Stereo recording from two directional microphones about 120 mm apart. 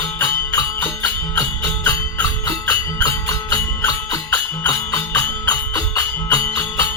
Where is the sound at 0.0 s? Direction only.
20° left (ahead or behind).